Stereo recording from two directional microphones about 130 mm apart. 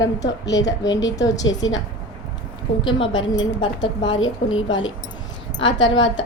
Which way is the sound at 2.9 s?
40° left (ahead or behind).